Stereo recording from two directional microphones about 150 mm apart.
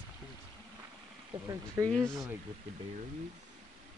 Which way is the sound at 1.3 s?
35° right (ahead or behind).